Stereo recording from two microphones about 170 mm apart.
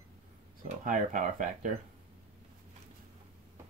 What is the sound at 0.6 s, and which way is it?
Speech, 50° right (ahead or behind).